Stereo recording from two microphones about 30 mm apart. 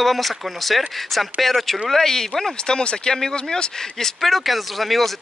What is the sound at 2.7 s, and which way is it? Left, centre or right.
Speech, left.